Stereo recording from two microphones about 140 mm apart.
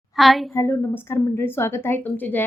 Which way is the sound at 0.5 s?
20° left (ahead or behind).